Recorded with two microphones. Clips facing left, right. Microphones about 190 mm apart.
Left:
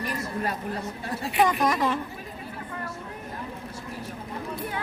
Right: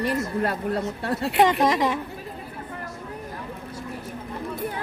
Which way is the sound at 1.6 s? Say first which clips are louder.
Right 3 dB; 20° right (ahead or behind).